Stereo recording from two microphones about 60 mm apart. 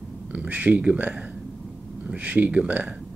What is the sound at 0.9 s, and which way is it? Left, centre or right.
Speech, right.